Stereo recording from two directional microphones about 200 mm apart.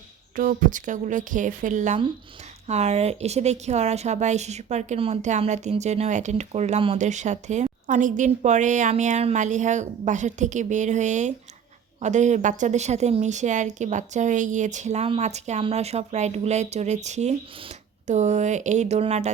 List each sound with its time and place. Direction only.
0.3 s speech: 45° right (ahead or behind)